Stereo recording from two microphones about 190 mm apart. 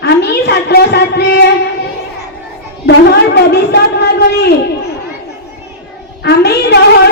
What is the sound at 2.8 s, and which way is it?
A woman's voice, 60° left (ahead or behind).